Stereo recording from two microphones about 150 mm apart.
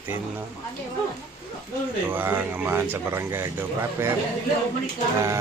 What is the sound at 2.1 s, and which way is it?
A man's voice, 15° right (ahead or behind).